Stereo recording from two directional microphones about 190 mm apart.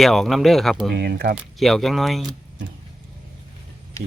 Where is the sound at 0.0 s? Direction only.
Centre (ahead or behind).